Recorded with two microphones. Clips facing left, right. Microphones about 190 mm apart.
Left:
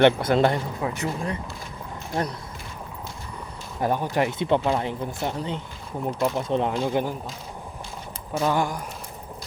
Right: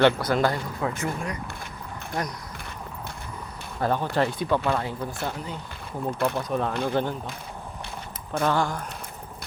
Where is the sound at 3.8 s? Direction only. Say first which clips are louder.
Left 1 dB; 15° left (ahead or behind).